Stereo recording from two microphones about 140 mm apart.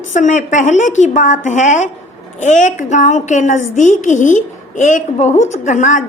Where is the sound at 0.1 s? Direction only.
60° left (ahead or behind).